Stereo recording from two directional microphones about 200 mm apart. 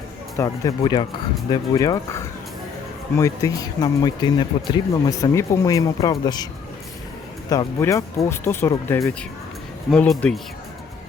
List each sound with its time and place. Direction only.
0.3 s speech: 15° left (ahead or behind)
7.5 s speech: 15° left (ahead or behind)